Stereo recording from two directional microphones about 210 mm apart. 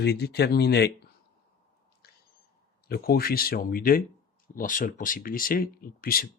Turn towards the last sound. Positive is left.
turn(degrees=45)  # may be behind; listen again after turning